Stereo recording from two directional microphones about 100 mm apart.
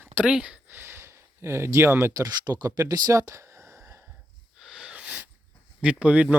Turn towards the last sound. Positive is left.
turn(degrees=-15)  # may be behind; listen again after turning